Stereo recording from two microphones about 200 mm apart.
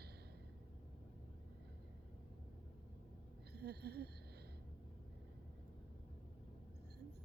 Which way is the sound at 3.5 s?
55° right (ahead or behind).